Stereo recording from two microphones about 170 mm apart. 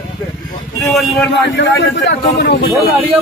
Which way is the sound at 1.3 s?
90° left.